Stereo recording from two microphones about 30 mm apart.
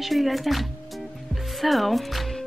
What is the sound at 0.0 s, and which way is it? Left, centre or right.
Speech, centre.